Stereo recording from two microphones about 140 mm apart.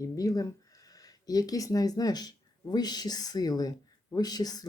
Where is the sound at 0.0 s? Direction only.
25° left (ahead or behind).